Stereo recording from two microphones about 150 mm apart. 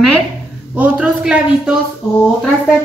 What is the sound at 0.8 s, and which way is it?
Speech, 5° right (ahead or behind).